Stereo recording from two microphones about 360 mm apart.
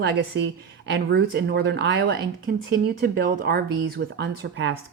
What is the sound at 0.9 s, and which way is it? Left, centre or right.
Speech, right.